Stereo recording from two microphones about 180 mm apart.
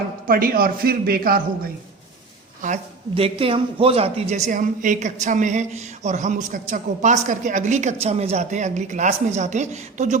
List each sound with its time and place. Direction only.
0.3 s a man's voice: 55° right (ahead or behind)
2.6 s a woman's voice: 45° right (ahead or behind)
3.2 s a woman's voice: 30° right (ahead or behind)